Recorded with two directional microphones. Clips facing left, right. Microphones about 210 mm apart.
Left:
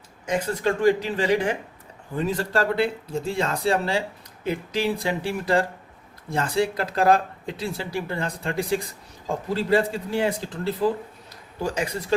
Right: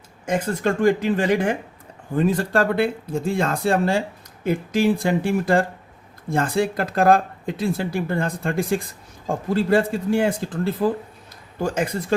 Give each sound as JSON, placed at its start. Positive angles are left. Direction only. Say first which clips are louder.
{"t": 0.3, "sound": "speech", "louder": "right 2 dB", "side_deg": -50}